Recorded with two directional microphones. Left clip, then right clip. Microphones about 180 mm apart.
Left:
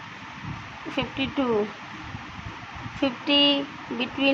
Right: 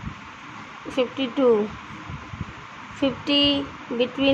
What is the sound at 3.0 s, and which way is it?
Speech, 15° right (ahead or behind).